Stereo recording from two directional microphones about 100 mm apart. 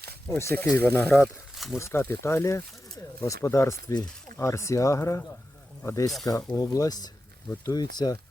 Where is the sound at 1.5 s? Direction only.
Centre (ahead or behind).